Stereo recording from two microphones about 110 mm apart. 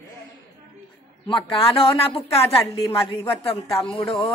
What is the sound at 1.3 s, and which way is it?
A woman's voice, 50° left (ahead or behind).